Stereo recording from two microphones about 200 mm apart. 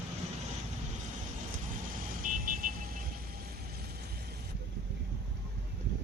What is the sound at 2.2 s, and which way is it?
Vehicle, 45° right (ahead or behind).